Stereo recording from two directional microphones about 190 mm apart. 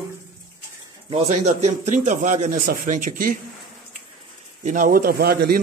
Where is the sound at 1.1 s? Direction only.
35° right (ahead or behind).